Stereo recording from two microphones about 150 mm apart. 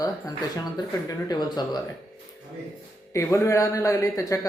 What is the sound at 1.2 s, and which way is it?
Speech, 25° left (ahead or behind).